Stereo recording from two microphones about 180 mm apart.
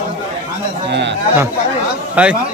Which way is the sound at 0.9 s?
75° right (ahead or behind).